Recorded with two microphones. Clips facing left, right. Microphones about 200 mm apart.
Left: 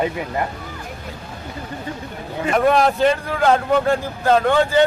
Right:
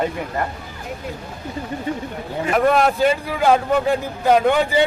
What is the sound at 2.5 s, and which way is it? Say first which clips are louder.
Speech: even; centre (ahead or behind).